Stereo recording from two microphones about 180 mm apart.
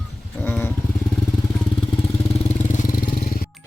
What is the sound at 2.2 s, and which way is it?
Vehicle, 35° left (ahead or behind).